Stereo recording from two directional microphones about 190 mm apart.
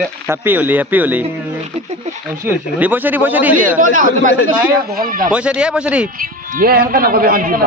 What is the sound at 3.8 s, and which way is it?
A man's voice, 45° right (ahead or behind).